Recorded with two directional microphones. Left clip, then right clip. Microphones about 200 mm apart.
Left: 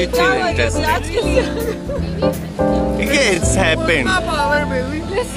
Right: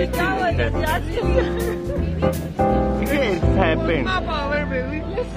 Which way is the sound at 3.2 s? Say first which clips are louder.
Left 4 dB; 10° left (ahead or behind).